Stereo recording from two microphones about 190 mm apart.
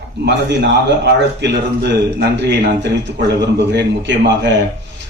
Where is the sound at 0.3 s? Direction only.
65° right (ahead or behind).